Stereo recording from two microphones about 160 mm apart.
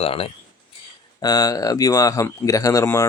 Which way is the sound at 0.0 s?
35° left (ahead or behind).